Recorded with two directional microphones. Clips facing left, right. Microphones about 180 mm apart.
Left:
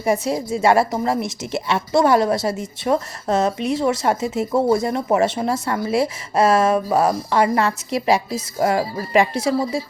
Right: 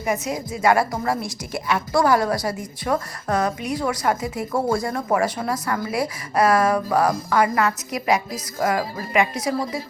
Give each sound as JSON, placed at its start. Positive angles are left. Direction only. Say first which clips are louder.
{"t": 0.0, "sound": "a woman's voice", "louder": "left 5 dB", "side_deg": 30}